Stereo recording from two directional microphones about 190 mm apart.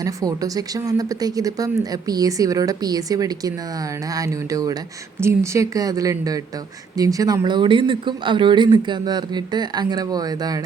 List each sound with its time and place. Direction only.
0.0 s speech: 20° right (ahead or behind)